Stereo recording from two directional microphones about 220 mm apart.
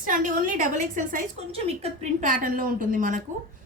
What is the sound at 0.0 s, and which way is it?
A woman's voice, 35° right (ahead or behind).